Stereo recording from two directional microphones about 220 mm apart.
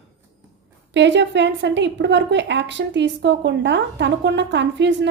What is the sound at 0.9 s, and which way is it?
A woman's voice, 55° right (ahead or behind).